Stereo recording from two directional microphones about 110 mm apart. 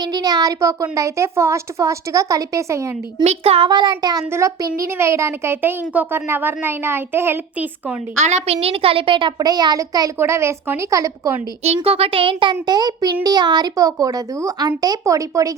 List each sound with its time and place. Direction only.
0.0 s speech: 40° right (ahead or behind)
3.2 s speech: 65° right (ahead or behind)
3.7 s speech: 40° right (ahead or behind)
4.3 s speech: 25° right (ahead or behind)
8.2 s a woman's voice: 90° right
8.6 s a child's voice: 60° right (ahead or behind); by 10.1 s 35° right (ahead or behind)
10.2 s speech: 25° right (ahead or behind)
11.6 s a child's voice: 70° right (ahead or behind); by 15.5 s 30° right (ahead or behind)